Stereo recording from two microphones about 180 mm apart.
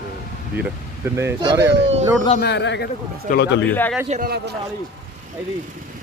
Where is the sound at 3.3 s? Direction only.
45° left (ahead or behind).